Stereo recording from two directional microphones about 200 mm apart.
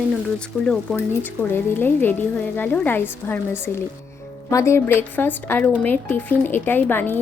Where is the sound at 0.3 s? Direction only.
5° left (ahead or behind).